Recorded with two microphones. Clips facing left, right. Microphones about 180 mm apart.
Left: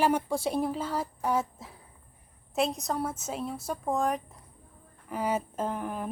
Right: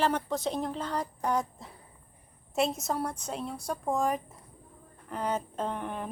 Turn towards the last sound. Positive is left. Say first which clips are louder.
# left 1 dB
turn(degrees=5)  # may be behind; listen again after turning